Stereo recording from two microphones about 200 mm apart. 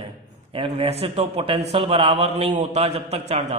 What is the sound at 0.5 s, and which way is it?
A man's voice, 30° right (ahead or behind).